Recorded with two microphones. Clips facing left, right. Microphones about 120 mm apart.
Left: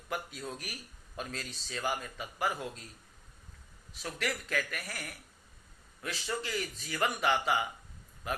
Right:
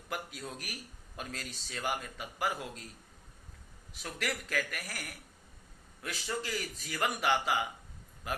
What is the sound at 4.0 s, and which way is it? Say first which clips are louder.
A man's voice: left 1 dB; 30° left (ahead or behind).